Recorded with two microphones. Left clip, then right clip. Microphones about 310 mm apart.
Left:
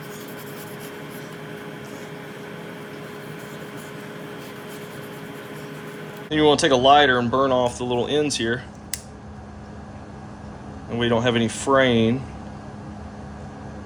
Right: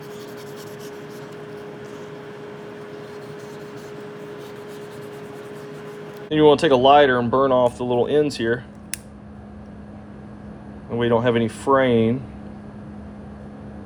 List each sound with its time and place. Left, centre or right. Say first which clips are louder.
6.3 s speech: right 2 dB; centre
10.9 s speech: right 2 dB; centre